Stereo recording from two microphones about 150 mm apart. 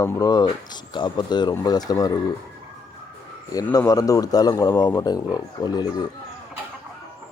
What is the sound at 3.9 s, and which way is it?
Speech, 20° left (ahead or behind).